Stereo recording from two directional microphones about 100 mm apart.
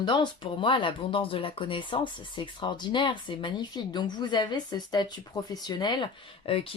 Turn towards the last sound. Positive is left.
turn(degrees=65)  # may be behind; listen again after turning